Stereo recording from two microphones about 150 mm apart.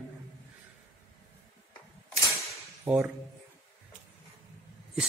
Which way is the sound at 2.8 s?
15° right (ahead or behind).